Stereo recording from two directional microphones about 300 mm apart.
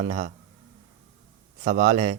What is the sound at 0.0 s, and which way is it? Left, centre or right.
Speech, right.